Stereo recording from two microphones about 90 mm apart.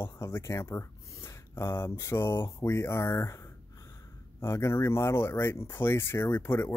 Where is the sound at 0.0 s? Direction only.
30° left (ahead or behind).